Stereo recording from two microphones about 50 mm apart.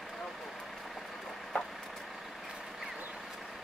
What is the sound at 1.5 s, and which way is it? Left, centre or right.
Vehicle, left.